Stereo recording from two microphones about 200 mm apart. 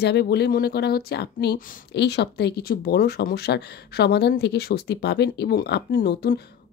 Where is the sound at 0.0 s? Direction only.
55° left (ahead or behind).